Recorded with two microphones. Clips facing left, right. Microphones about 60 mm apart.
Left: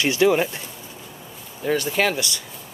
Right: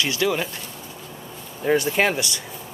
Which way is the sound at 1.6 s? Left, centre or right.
Centre.